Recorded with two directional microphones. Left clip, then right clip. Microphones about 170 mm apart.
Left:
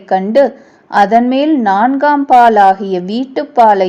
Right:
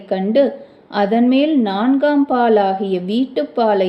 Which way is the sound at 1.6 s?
10° left (ahead or behind).